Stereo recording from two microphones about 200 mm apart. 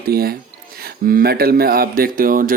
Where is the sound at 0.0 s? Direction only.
50° right (ahead or behind).